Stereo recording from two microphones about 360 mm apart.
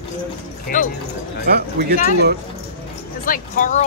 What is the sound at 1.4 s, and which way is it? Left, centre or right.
Speech, right.